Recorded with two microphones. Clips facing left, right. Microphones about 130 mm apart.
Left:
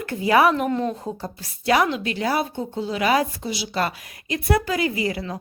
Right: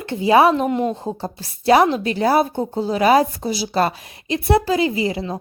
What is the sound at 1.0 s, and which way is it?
A woman's voice, 30° right (ahead or behind).